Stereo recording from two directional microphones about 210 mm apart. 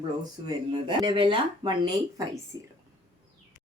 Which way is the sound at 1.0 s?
25° right (ahead or behind).